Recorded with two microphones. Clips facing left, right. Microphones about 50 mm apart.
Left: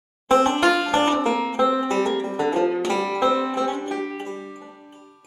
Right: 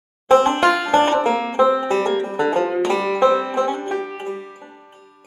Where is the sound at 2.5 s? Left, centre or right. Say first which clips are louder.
Right 2 dB; centre.